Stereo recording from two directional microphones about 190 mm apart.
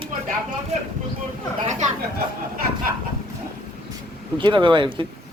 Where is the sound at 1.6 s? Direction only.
40° right (ahead or behind).